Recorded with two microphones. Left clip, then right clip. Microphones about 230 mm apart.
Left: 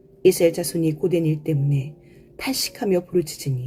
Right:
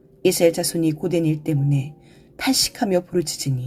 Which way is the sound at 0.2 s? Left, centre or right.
Right.